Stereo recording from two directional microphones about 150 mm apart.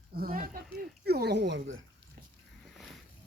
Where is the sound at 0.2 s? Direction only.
70° right (ahead or behind).